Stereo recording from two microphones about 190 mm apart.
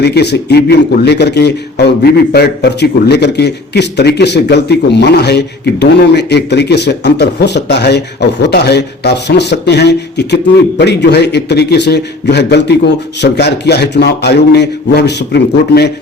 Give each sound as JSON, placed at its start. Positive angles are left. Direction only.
{"t": 0.0, "sound": "a man's voice", "side_deg": 60}